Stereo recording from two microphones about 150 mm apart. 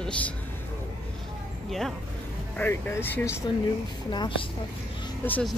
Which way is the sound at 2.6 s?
15° left (ahead or behind).